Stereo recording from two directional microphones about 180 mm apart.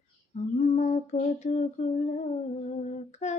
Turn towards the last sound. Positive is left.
turn(degrees=45)  # may be behind; listen again after turning